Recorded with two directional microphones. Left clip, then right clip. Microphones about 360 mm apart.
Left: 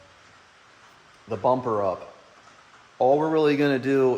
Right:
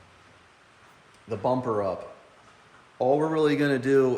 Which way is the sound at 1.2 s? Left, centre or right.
Centre.